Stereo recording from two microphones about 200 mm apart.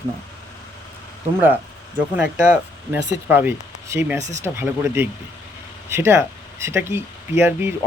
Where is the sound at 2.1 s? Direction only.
5° right (ahead or behind).